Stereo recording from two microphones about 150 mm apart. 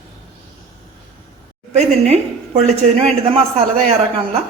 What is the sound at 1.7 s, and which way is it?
A woman's voice, 45° right (ahead or behind).